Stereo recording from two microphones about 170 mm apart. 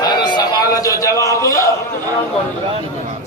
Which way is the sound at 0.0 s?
25° left (ahead or behind).